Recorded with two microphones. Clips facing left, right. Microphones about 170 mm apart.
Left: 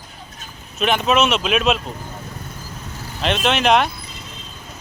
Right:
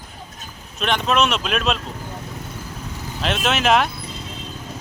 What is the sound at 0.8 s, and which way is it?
Speech, 5° left (ahead or behind).